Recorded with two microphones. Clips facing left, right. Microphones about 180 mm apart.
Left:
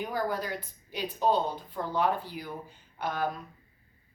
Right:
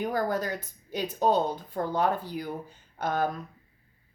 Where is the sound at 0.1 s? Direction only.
45° right (ahead or behind).